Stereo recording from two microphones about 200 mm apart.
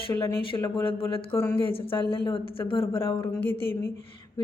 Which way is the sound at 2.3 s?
25° left (ahead or behind).